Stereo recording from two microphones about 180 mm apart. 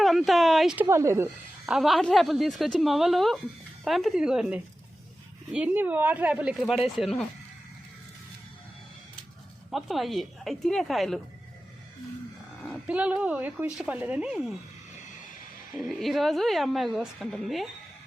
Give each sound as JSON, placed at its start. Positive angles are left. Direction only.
{"t": 0.0, "sound": "a sound", "side_deg": 0}
{"t": 0.9, "sound": "a woman's voice", "side_deg": -15}
{"t": 1.6, "sound": "a woman's voice", "side_deg": 0}
{"t": 9.7, "sound": "a woman's voice", "side_deg": 0}
{"t": 12.6, "sound": "a woman's voice", "side_deg": -5}
{"t": 15.8, "sound": "a woman's voice", "side_deg": 0}